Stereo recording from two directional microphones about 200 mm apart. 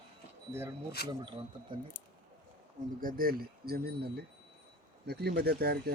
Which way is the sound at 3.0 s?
45° right (ahead or behind).